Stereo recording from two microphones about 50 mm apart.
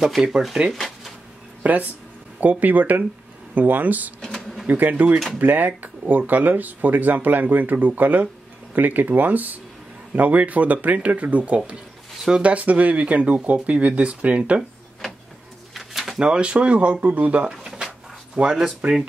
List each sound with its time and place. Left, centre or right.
0.2 s speech: centre
0.7 s a sound: centre
1.6 s speech: right
4.2 s a sound: centre
4.6 s speech: right
15.7 s pigeon: centre
16.2 s speech: right
17.5 s drawer open or close: centre
18.4 s speech: centre